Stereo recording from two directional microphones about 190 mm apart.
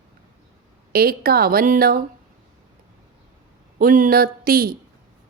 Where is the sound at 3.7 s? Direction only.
45° right (ahead or behind).